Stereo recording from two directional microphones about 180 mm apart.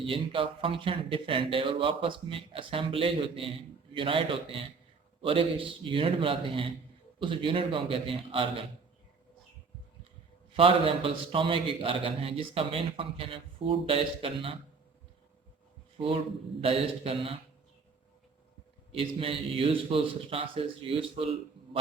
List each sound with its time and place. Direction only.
0.0 s a man's voice: 30° right (ahead or behind)
10.5 s a man's voice: 30° right (ahead or behind)
16.0 s a man's voice: 30° right (ahead or behind)
18.9 s a man's voice: 30° right (ahead or behind)